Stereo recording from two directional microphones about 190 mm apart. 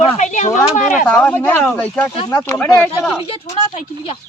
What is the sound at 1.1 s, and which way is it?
Speech, 5° left (ahead or behind).